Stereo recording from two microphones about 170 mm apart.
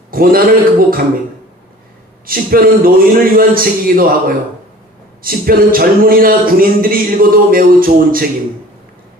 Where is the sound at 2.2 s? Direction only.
60° right (ahead or behind).